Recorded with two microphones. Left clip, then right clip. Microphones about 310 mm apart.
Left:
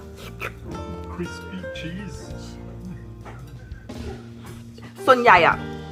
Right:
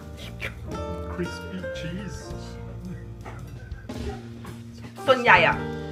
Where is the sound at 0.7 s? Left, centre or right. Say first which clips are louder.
Right 1 dB; centre.